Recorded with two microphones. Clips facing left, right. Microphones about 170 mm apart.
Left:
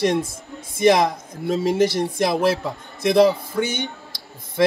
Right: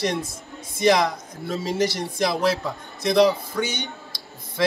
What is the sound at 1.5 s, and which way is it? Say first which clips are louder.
Speech: left 5 dB; 55° left (ahead or behind).